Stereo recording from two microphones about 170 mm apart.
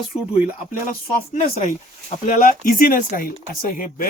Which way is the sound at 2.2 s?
50° left (ahead or behind).